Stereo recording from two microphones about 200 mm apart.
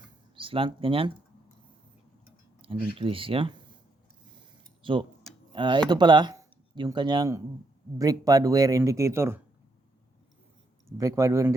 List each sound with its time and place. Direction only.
0.3 s speech: 25° right (ahead or behind)
2.6 s speech: 25° right (ahead or behind)
4.8 s speech: 25° right (ahead or behind)
10.8 s speech: 15° right (ahead or behind)